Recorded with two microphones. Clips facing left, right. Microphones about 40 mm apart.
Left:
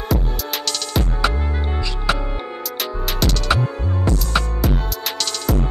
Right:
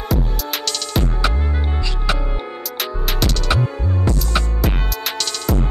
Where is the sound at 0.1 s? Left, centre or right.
Centre.